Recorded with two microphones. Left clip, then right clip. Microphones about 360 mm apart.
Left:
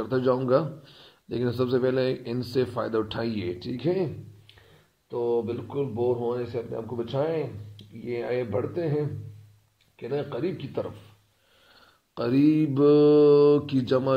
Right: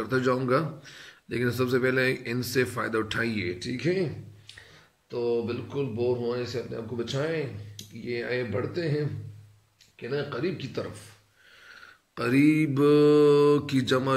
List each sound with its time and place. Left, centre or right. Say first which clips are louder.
0.0 s a man's voice: left 1 dB; centre
5.1 s a man's voice: left 1 dB; centre
9.9 s a man's voice: left 1 dB; centre
12.4 s a man's voice: left 1 dB; centre